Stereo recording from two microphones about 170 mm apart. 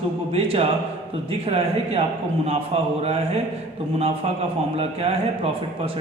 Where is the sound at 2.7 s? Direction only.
35° right (ahead or behind).